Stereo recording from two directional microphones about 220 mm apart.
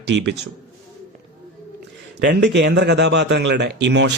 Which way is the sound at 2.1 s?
50° right (ahead or behind).